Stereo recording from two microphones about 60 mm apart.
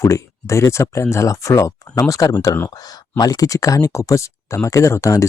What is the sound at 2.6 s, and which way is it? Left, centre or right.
Speech, left.